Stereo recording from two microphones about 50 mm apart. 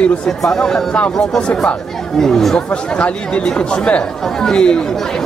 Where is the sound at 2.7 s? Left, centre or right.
Left.